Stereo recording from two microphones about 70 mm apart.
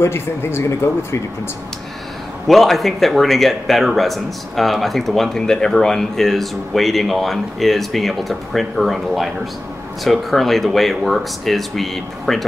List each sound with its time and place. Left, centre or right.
0.0 s speech: left
2.4 s speech: centre